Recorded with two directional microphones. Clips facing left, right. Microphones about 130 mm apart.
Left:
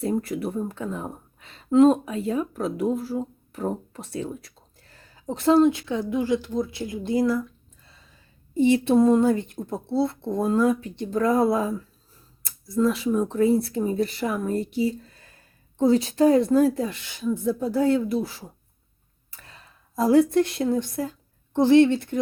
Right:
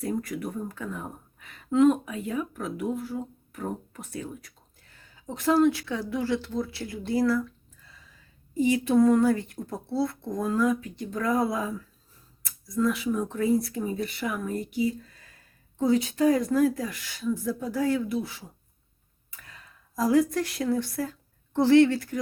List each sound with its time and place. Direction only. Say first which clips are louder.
0.0 s speech: left 5 dB; 30° left (ahead or behind)
8.5 s a woman's voice: left 3 dB; 30° left (ahead or behind)